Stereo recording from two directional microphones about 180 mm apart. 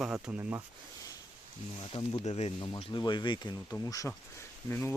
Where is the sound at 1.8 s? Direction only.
30° left (ahead or behind).